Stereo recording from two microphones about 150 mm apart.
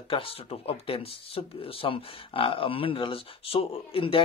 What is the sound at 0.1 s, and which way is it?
Speech, 40° left (ahead or behind).